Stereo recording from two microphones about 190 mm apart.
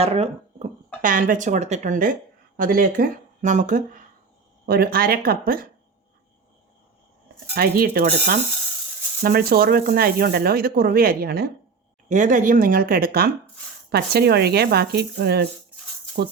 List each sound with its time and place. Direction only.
0.0 s speech: 30° right (ahead or behind)
1.0 s speech: 45° right (ahead or behind)
4.6 s speech: 55° right (ahead or behind)
7.3 s speech: 55° right (ahead or behind)
12.0 s speech: 40° right (ahead or behind); by 15.4 s 60° right (ahead or behind)